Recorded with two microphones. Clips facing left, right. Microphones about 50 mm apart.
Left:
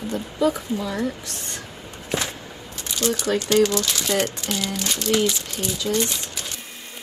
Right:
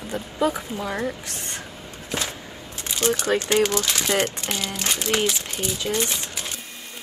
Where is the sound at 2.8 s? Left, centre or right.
Right.